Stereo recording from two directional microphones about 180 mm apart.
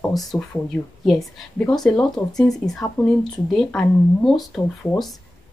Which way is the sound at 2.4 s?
20° left (ahead or behind).